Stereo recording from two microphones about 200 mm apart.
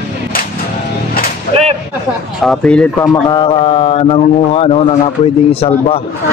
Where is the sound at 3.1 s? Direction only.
20° left (ahead or behind).